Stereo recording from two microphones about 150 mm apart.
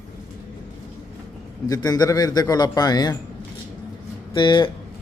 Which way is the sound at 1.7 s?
25° left (ahead or behind).